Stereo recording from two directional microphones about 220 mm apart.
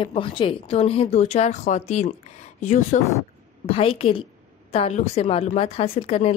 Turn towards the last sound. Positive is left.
turn(degrees=30)  # may be behind; listen again after turning